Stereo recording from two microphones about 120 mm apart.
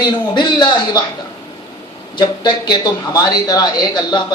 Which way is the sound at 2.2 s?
40° left (ahead or behind).